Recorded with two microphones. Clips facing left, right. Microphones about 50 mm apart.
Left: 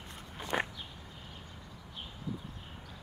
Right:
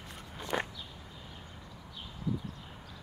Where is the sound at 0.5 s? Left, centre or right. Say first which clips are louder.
Left 1 dB; centre.